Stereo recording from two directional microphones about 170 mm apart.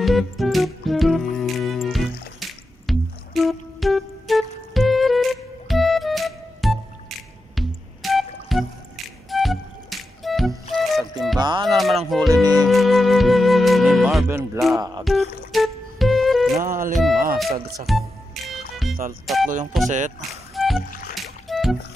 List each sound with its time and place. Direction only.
0.0 s music: centre (ahead or behind)
11.3 s music: 25° right (ahead or behind)
11.6 s a sound: centre (ahead or behind)
12.1 s music: centre (ahead or behind)
14.2 s music: 15° right (ahead or behind)
15.0 s music: centre (ahead or behind)
16.6 s music: 55° right (ahead or behind)
16.9 s music: centre (ahead or behind)
19.7 s a sound: centre (ahead or behind)
20.5 s music: centre (ahead or behind)